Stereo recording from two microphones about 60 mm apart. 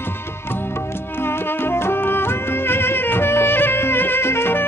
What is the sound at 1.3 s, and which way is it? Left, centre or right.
Music, left.